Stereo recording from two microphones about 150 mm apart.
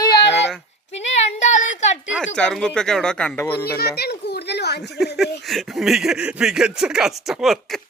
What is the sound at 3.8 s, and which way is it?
Children playing, 90° left.